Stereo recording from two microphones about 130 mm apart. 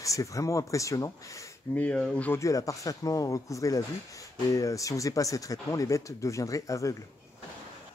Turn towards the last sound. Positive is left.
turn(degrees=25)  # may be behind; listen again after turning